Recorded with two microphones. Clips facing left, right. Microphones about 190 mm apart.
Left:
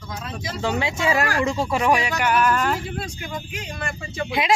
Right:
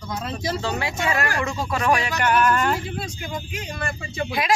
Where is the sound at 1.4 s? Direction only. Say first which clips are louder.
Left 3 dB; 25° left (ahead or behind); by 3.0 s 5° left (ahead or behind).